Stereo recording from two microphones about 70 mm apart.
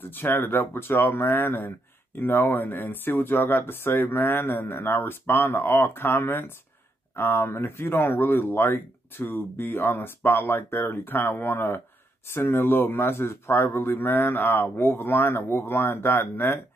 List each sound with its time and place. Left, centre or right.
0.0 s speech: left